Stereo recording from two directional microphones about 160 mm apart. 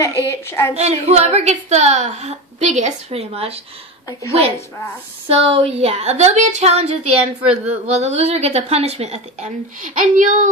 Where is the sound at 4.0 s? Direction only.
20° left (ahead or behind).